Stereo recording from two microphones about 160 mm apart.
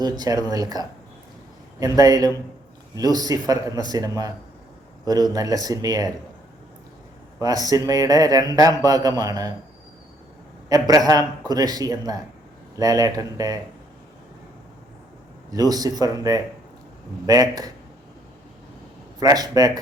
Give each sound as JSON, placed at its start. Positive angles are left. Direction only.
{"t": 0.0, "sound": "speech", "side_deg": -25}
{"t": 7.4, "sound": "speech", "side_deg": -25}
{"t": 10.7, "sound": "speech", "side_deg": -20}
{"t": 15.4, "sound": "speech", "side_deg": -25}
{"t": 19.2, "sound": "speech", "side_deg": -25}